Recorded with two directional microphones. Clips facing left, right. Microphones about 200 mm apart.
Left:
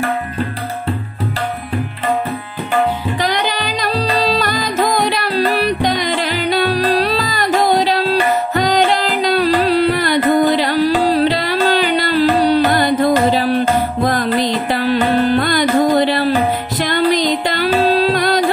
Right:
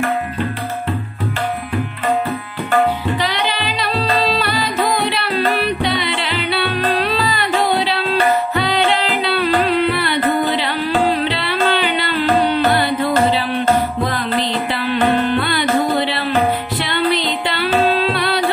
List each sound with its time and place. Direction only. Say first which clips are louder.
3.2 s music: left 2 dB; 45° left (ahead or behind)
17.8 s carnatic music: left 3 dB; 40° left (ahead or behind)